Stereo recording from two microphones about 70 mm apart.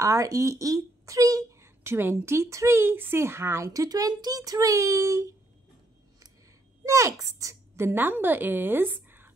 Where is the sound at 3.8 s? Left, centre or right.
Right.